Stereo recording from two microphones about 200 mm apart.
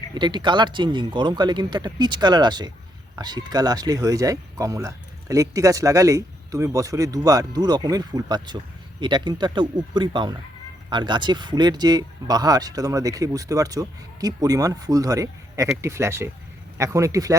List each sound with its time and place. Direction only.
0.1 s speech: 20° right (ahead or behind)